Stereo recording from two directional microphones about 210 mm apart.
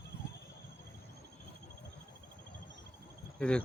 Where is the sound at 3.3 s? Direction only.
5° left (ahead or behind).